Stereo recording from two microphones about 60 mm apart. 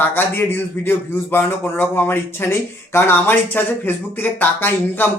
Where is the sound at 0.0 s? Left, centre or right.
Left.